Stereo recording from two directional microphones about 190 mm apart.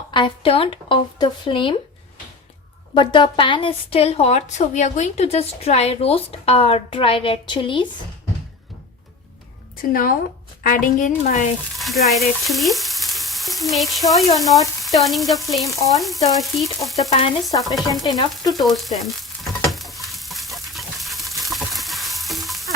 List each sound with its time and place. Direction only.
0.1 s speech: 25° left (ahead or behind)
2.9 s a woman's voice: 25° left (ahead or behind)
9.9 s a woman's voice: 50° left (ahead or behind)
11.8 s frying: centre (ahead or behind)
15.7 s frying: 15° left (ahead or behind)
16.0 s frying: centre (ahead or behind)
17.1 s a woman's voice: 30° left (ahead or behind)
17.5 s speech: 20° left (ahead or behind)
18.6 s frying: centre (ahead or behind)